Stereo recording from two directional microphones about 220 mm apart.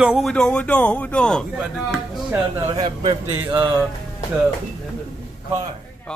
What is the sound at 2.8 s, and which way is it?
Speech, 20° right (ahead or behind).